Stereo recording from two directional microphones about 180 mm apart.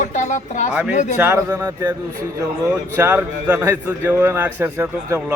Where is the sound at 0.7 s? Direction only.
10° right (ahead or behind).